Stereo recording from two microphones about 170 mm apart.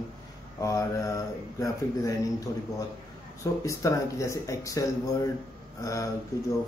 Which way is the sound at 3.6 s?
20° left (ahead or behind).